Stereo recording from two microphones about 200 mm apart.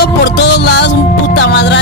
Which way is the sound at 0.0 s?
55° left (ahead or behind).